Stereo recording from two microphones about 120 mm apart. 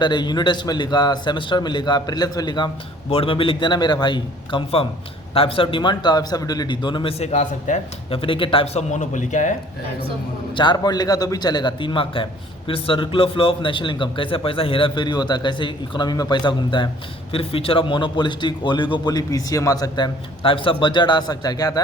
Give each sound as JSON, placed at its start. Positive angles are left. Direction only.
{"t": 0.0, "sound": "a man's voice", "side_deg": 40}
{"t": 3.1, "sound": "a man's voice", "side_deg": 50}
{"t": 5.3, "sound": "a man's voice", "side_deg": 50}
{"t": 8.1, "sound": "speech", "side_deg": 45}
{"t": 10.5, "sound": "a man's voice", "side_deg": 40}
{"t": 17.3, "sound": "a man's voice", "side_deg": 50}
{"t": 20.4, "sound": "a man's voice", "side_deg": 45}